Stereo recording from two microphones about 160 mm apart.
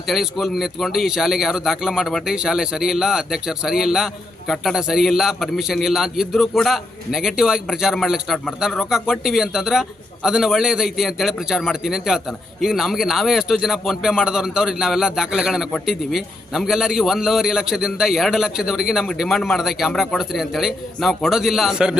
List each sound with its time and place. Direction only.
0.1 s a man's voice: centre (ahead or behind)